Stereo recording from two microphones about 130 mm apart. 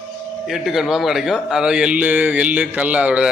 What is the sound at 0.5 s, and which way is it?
A man's voice, centre (ahead or behind).